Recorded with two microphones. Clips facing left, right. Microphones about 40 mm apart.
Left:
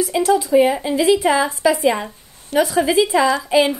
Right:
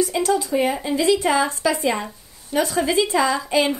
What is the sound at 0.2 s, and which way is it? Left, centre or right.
A woman's voice, centre.